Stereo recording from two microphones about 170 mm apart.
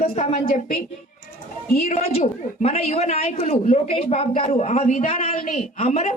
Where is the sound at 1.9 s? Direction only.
40° left (ahead or behind).